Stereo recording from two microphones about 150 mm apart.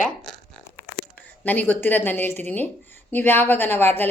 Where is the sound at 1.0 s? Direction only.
90° left.